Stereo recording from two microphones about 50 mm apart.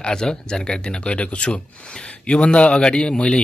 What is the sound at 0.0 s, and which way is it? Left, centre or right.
Speech, centre.